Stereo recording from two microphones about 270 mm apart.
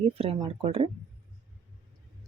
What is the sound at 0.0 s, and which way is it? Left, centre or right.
Speech, right.